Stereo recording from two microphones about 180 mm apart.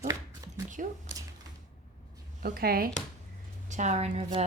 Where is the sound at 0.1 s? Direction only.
20° right (ahead or behind).